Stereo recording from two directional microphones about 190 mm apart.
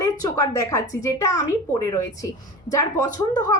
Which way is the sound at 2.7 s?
20° left (ahead or behind).